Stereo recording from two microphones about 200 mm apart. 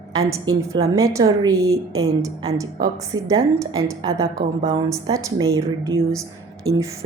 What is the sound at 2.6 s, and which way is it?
A woman's voice, 15° right (ahead or behind).